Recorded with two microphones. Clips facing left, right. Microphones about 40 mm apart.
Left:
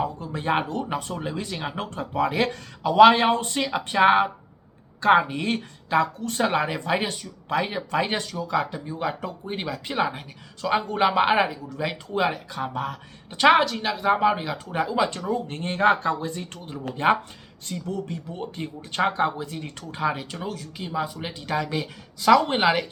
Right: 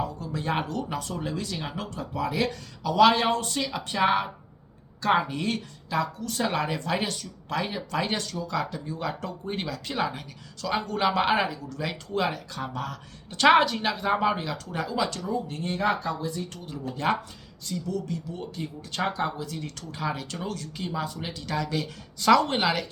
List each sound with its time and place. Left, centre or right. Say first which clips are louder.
0.0 s a sound: left 3 dB; left
0.6 s speech: left 3 dB; left
9.6 s speech: left 5 dB; left
13.5 s speech: even; centre; by 15.2 s left
15.4 s speech: left 8 dB; left
20.4 s speech: left 1 dB; centre
22.2 s speech: left 2 dB; centre
22.4 s speech: left 4 dB; left